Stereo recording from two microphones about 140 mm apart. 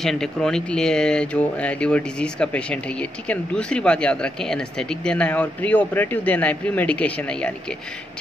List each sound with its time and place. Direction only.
0.0 s speech: 5° left (ahead or behind)